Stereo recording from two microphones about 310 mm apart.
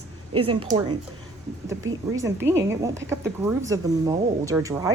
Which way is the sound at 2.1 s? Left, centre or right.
Centre.